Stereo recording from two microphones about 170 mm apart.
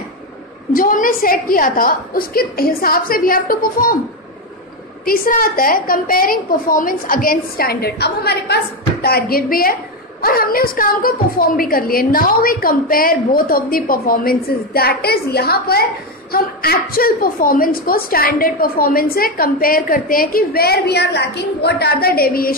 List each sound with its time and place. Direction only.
0.7 s a woman's voice: 55° left (ahead or behind)
5.0 s a woman's voice: 55° left (ahead or behind)